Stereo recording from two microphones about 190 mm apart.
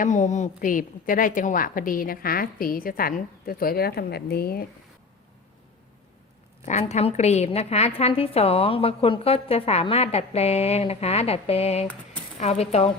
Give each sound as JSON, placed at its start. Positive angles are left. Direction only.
{"t": 0.0, "sound": "a woman's voice", "side_deg": 40}
{"t": 6.7, "sound": "a woman's voice", "side_deg": 35}